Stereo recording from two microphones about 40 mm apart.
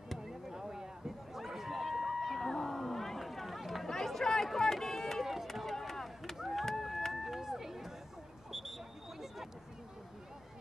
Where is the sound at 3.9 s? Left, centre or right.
Centre.